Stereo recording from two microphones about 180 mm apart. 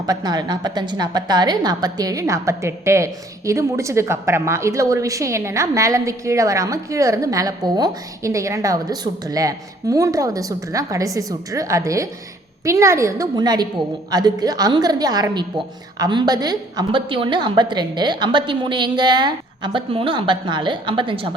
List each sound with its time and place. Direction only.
0.0 s a woman's voice: 20° right (ahead or behind)